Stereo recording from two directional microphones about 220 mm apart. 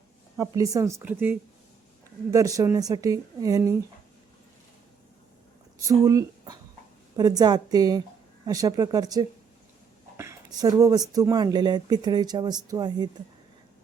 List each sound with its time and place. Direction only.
0.3 s speech: 15° right (ahead or behind)
5.8 s speech: 15° right (ahead or behind)